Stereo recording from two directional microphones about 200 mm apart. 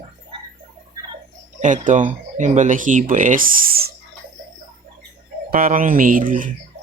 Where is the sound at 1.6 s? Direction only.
40° right (ahead or behind).